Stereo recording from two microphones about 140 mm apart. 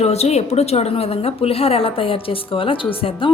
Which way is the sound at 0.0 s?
50° left (ahead or behind).